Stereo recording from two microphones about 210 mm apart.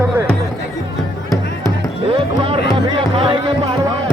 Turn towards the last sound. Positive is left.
turn(degrees=-25)  # may be behind; listen again after turning